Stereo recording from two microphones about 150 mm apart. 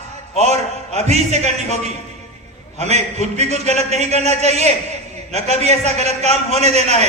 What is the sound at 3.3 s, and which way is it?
A man's voice, 45° right (ahead or behind).